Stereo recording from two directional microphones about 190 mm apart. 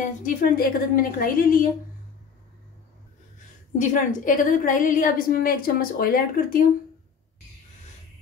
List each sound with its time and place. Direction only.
0.0 s a woman's voice: 45° left (ahead or behind)
3.7 s a woman's voice: 40° left (ahead or behind)